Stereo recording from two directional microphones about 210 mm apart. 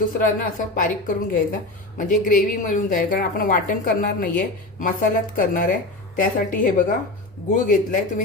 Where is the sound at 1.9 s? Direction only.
40° left (ahead or behind).